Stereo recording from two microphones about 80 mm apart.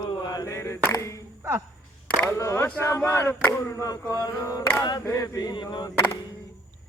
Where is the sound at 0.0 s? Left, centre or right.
Left.